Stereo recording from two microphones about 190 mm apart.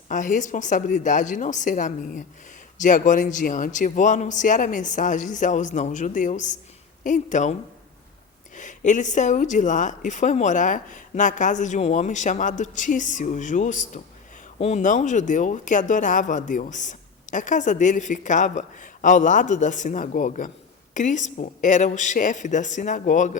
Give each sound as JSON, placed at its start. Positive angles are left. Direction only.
{"t": 0.1, "sound": "speech", "side_deg": 40}
{"t": 8.5, "sound": "speech", "side_deg": 40}